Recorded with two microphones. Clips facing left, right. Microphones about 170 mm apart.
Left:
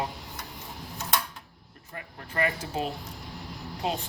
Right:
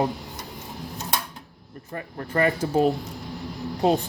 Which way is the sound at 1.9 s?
40° right (ahead or behind).